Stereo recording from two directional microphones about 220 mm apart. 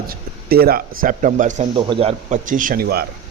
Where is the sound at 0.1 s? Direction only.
45° right (ahead or behind).